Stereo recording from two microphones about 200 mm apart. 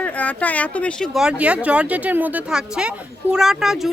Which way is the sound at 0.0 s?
5° left (ahead or behind).